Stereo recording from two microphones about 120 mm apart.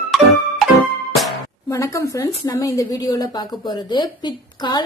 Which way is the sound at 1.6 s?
25° left (ahead or behind).